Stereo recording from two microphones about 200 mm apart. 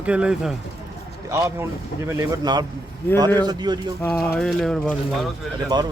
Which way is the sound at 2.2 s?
20° right (ahead or behind).